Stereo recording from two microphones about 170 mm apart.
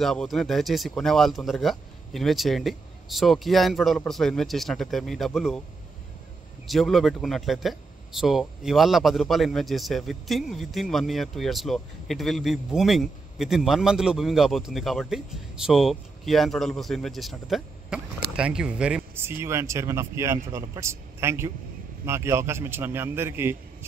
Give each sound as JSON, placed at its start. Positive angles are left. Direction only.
{"t": 0.0, "sound": "speech", "side_deg": 0}
{"t": 6.7, "sound": "speech", "side_deg": 0}